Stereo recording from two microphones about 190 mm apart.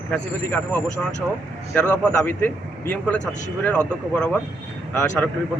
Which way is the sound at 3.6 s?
5° left (ahead or behind).